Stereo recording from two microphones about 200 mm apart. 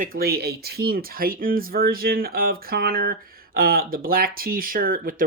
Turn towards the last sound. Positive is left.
turn(degrees=-45)  # may be behind; listen again after turning